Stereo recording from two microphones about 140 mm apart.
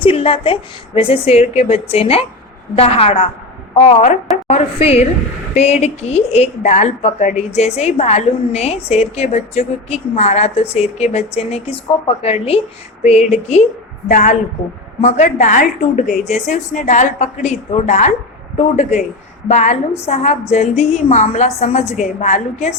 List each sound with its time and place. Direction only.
0.0 s a woman's voice: 40° left (ahead or behind)
14.1 s a woman's voice: 65° left (ahead or behind)
15.0 s a woman's voice: 55° left (ahead or behind)